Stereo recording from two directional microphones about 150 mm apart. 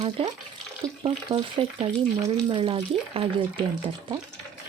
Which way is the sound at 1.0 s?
35° right (ahead or behind).